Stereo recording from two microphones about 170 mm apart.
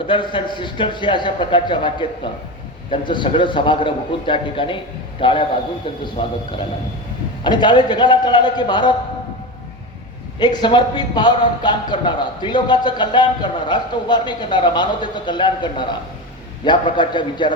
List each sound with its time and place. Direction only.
0.1 s speech: 30° left (ahead or behind)
7.4 s speech: 25° left (ahead or behind)
10.4 s speech: 25° left (ahead or behind)